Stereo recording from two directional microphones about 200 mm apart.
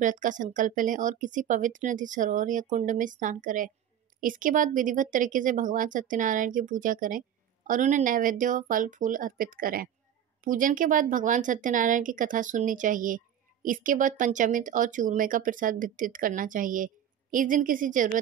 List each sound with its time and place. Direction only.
0.0 s speech: 40° right (ahead or behind)